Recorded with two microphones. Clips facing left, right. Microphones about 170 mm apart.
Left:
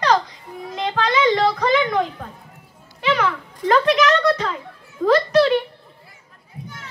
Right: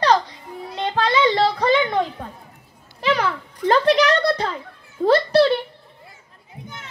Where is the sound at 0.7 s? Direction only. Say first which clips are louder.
Even; 30° right (ahead or behind).